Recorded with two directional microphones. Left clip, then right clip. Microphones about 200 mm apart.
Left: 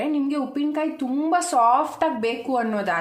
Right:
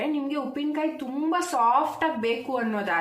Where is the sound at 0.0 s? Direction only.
50° left (ahead or behind).